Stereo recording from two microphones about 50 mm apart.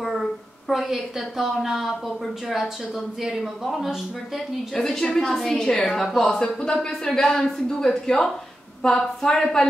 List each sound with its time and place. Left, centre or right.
0.0 s a woman's voice: centre
6.2 s speech: centre